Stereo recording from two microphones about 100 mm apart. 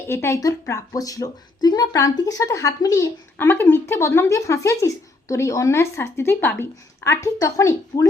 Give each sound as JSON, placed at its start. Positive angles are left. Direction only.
{"t": 0.1, "sound": "a woman's voice", "side_deg": 25}
{"t": 3.3, "sound": "a woman's voice", "side_deg": 20}